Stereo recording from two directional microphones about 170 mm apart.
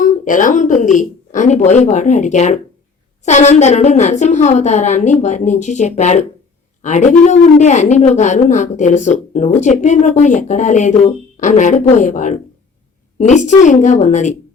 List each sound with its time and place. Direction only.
0.0 s a woman's voice: 50° left (ahead or behind)